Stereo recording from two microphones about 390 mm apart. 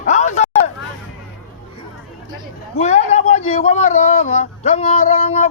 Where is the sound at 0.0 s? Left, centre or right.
Centre.